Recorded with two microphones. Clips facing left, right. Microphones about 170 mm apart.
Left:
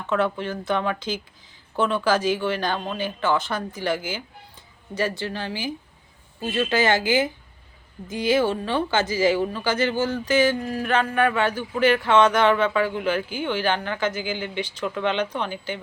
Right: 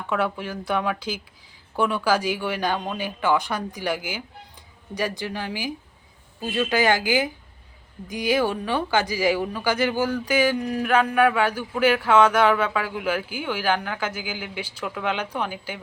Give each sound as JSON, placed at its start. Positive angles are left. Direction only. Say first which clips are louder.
{"t": 0.1, "sound": "speech", "louder": "left 2 dB", "side_deg": -10}